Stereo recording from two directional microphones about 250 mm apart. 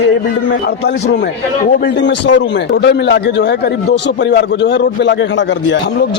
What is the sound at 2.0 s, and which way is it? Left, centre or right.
Speech, left.